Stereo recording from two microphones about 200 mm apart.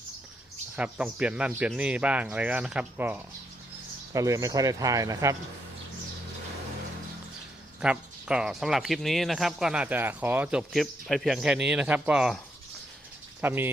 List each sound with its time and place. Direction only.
0.8 s speech: 5° right (ahead or behind)
7.8 s speech: 5° right (ahead or behind)
13.4 s speech: 10° right (ahead or behind)